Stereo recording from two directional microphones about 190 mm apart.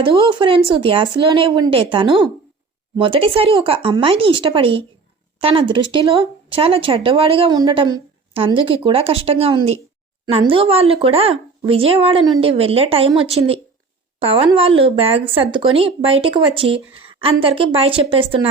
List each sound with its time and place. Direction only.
0.0 s speech: 25° right (ahead or behind)